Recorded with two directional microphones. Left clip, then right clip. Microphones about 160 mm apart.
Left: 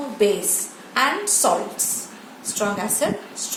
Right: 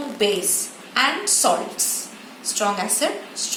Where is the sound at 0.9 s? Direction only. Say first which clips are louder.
Even; 75° left (ahead or behind).